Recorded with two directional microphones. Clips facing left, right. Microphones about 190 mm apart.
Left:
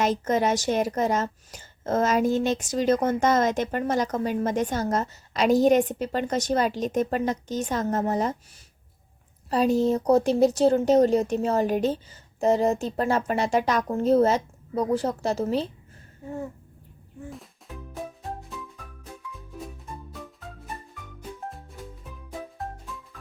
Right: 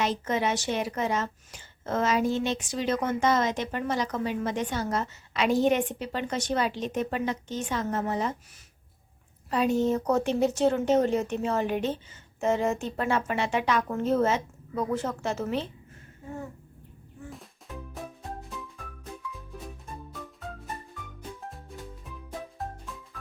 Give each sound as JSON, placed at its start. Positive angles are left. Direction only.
{"t": 0.0, "sound": "a woman's voice", "side_deg": 45}
{"t": 9.5, "sound": "speech", "side_deg": 35}
{"t": 17.2, "sound": "music", "side_deg": 0}